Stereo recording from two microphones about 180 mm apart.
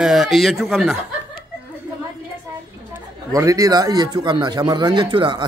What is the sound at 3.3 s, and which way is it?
Speech, 20° right (ahead or behind).